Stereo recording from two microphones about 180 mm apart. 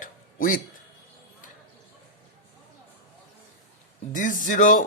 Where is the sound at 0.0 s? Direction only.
50° left (ahead or behind).